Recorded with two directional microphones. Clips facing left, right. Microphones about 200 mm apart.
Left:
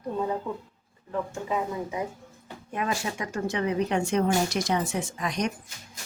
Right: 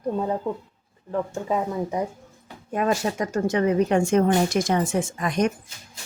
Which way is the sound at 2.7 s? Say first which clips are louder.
Right 7 dB; 45° right (ahead or behind).